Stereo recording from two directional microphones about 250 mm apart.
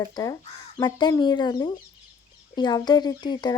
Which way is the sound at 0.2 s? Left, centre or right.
Centre.